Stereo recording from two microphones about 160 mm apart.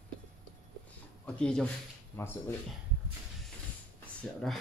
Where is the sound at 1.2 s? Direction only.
5° left (ahead or behind).